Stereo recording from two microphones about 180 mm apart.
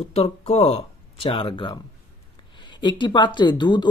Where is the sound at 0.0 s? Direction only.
35° left (ahead or behind).